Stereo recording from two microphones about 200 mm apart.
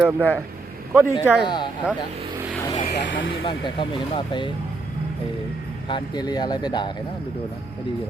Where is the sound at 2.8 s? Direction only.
60° left (ahead or behind).